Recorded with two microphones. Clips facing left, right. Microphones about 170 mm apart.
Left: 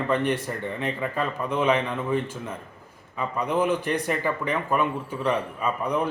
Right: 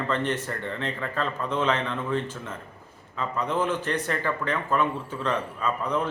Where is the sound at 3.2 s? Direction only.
10° left (ahead or behind).